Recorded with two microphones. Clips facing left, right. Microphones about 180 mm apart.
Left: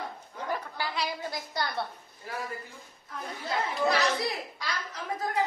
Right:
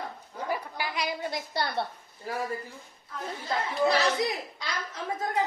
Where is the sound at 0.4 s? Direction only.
10° right (ahead or behind); by 1.9 s 25° right (ahead or behind).